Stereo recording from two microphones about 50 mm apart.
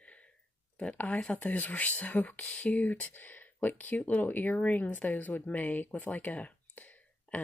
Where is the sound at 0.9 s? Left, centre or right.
Left.